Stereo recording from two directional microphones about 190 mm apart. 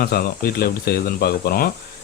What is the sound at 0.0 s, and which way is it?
Speech, 55° left (ahead or behind).